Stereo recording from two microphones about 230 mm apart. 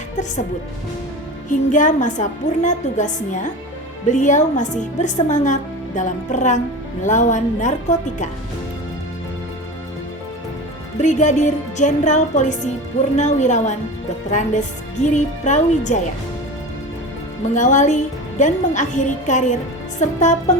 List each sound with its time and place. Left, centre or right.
1.5 s a woman's voice: left
10.9 s a woman's voice: left
17.5 s a woman's voice: left